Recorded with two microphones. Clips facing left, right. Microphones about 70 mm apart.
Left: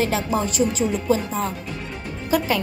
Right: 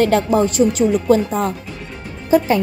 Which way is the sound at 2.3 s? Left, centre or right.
Right.